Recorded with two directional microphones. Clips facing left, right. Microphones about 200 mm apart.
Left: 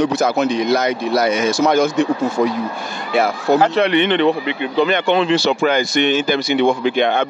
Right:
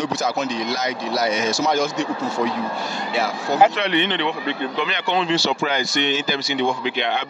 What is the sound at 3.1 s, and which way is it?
Speech, 55° left (ahead or behind).